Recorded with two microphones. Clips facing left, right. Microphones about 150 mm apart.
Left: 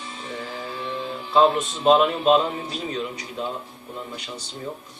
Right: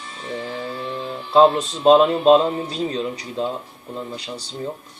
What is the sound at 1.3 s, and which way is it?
A man's voice, 30° right (ahead or behind).